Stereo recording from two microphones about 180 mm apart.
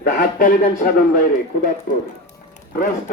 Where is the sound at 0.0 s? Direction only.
60° left (ahead or behind).